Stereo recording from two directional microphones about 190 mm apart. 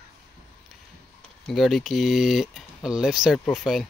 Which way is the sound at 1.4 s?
Centre (ahead or behind).